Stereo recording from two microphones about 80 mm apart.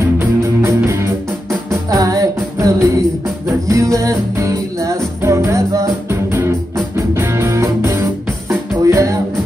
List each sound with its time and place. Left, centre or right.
0.4 s music: right